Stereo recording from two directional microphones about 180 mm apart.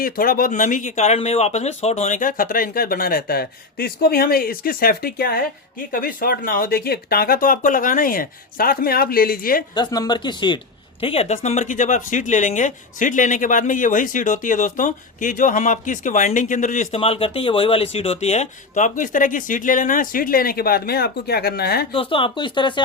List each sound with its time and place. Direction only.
0.0 s speech: 55° left (ahead or behind)
9.7 s speech: 20° left (ahead or behind); by 21.8 s 60° left (ahead or behind)
21.9 s speech: 30° left (ahead or behind)